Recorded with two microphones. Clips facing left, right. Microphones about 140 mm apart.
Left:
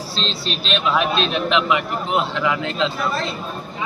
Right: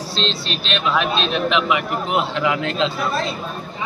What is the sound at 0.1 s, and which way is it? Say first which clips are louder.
A man's voice: right 2 dB; 5° left (ahead or behind).